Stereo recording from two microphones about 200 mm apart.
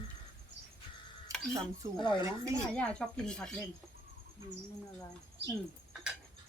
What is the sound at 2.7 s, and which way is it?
Speech, 5° left (ahead or behind).